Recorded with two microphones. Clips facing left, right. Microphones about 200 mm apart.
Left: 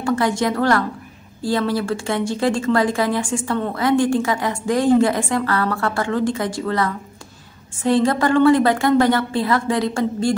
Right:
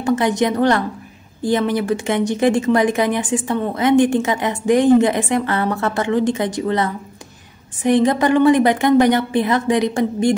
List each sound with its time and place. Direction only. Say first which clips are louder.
0.0 s speech: right 2 dB; 20° right (ahead or behind)